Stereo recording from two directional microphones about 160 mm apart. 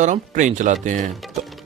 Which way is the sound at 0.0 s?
50° right (ahead or behind).